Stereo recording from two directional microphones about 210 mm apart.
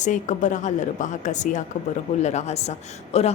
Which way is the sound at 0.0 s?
35° left (ahead or behind).